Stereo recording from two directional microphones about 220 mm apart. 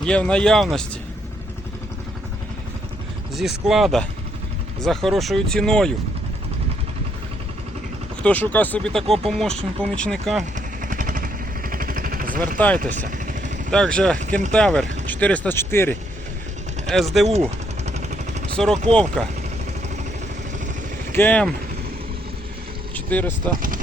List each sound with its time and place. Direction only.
0.0 s speech: 5° left (ahead or behind)
3.3 s speech: centre (ahead or behind)
8.2 s speech: 5° left (ahead or behind)
10.8 s vehicle: 35° right (ahead or behind)
12.5 s speech: 5° left (ahead or behind)
12.8 s vehicle: 35° right (ahead or behind)
13.7 s speech: 5° left (ahead or behind)
17.8 s a sound: 30° right (ahead or behind)
18.5 s speech: centre (ahead or behind)
21.1 s speech: 10° left (ahead or behind)
23.0 s vehicle: 5° left (ahead or behind)